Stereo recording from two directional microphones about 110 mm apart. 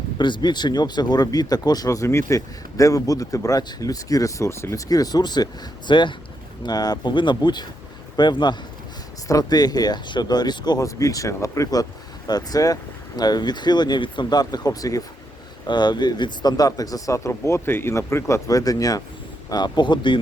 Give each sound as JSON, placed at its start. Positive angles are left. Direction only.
{"t": 0.2, "sound": "a man's voice", "side_deg": 45}